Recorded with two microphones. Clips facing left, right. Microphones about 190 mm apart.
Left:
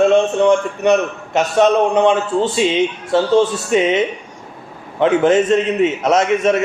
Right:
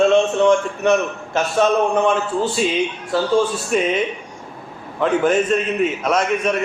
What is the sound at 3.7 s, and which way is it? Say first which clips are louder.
Speech: left 4 dB; 90° left.